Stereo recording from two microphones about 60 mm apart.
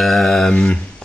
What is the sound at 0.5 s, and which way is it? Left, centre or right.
Speech, centre.